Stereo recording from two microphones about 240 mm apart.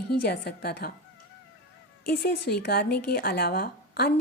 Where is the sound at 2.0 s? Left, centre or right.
Left.